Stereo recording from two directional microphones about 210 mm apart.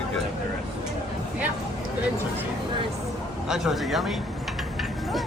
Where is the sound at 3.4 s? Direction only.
Centre (ahead or behind).